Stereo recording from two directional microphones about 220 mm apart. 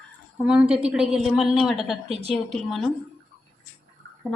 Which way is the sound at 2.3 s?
Centre (ahead or behind).